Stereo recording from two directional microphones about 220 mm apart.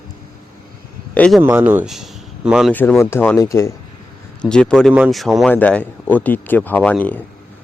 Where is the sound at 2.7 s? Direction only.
10° left (ahead or behind).